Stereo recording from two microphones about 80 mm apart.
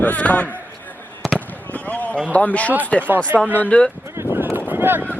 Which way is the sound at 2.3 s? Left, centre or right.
Centre.